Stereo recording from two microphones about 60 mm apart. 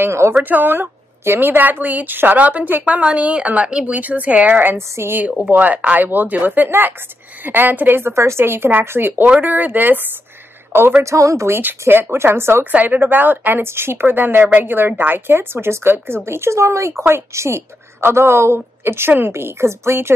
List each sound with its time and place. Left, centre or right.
0.0 s a woman's voice: right
0.4 s a woman's voice: right
4.7 s a woman's voice: right
5.5 s speech: right
11.0 s speech: right
11.8 s a woman's voice: right
12.7 s a woman's voice: right